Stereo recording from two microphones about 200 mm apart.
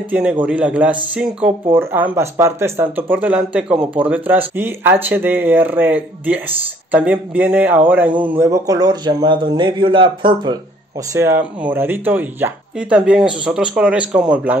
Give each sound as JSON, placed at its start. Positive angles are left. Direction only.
{"t": 0.1, "sound": "speech", "side_deg": -5}
{"t": 11.1, "sound": "speech", "side_deg": -10}